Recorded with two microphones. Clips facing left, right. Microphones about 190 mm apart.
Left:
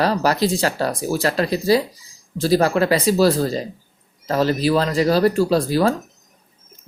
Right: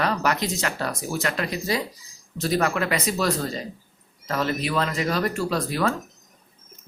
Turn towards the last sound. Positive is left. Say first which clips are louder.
# left 7 dB
turn(degrees=30)  # may be behind; listen again after turning